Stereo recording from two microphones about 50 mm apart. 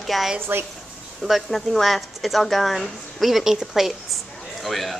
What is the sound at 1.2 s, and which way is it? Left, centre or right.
Speech, centre.